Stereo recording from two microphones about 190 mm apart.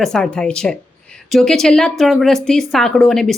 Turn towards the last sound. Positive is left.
turn(degrees=0)  # may be behind; listen again after turning